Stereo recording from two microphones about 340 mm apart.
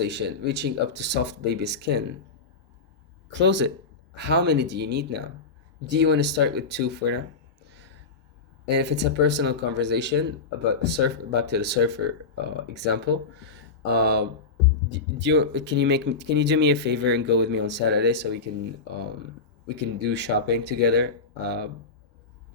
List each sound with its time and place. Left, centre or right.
0.1 s speech: right
3.4 s speech: right
8.6 s speech: right
19.7 s speech: right